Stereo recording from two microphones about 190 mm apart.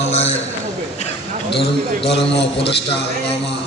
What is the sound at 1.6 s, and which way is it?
Speech, 65° left (ahead or behind).